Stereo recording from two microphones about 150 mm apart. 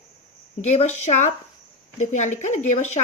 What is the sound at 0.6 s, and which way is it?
A woman's voice, 45° left (ahead or behind).